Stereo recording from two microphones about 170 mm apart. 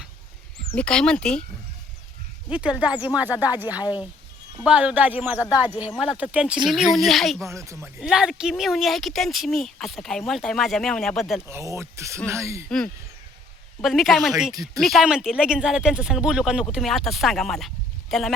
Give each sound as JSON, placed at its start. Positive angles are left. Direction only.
{"t": 0.8, "sound": "speech", "side_deg": 5}
{"t": 2.5, "sound": "speech", "side_deg": -5}
{"t": 7.5, "sound": "speech", "side_deg": -15}
{"t": 8.0, "sound": "speech", "side_deg": -5}
{"t": 11.4, "sound": "speech", "side_deg": -15}
{"t": 13.8, "sound": "speech", "side_deg": 0}